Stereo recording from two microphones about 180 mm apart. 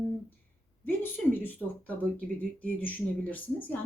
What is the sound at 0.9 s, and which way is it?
Speech, 10° left (ahead or behind).